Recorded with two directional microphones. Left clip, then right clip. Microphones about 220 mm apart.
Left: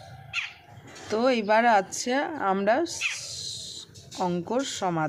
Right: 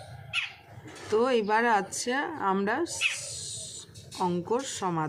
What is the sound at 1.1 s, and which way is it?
Speech, 30° left (ahead or behind).